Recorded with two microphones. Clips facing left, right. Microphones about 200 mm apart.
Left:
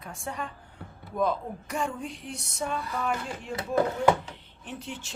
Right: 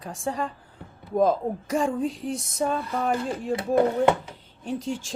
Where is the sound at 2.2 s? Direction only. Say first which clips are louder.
Right 9 dB; 90° right.